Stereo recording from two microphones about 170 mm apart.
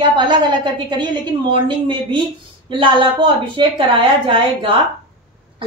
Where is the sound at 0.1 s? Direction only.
25° right (ahead or behind).